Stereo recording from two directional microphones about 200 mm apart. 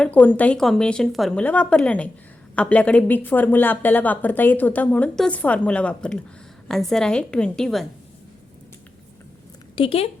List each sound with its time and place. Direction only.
0.0 s a woman's voice: 10° left (ahead or behind)
9.7 s speech: 30° left (ahead or behind)